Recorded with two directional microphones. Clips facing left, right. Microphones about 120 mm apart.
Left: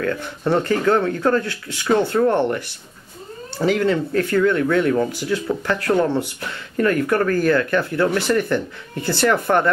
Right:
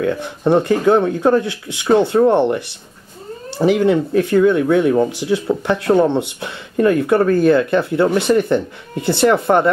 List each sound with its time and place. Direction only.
0.0 s speech: 15° right (ahead or behind)